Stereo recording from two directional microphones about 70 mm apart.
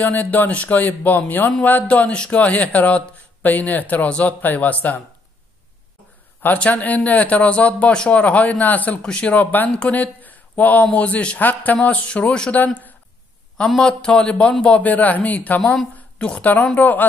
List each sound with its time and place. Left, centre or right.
0.0 s a man's voice: left
6.4 s a man's voice: left
13.7 s a man's voice: centre
15.6 s a woman's voice: centre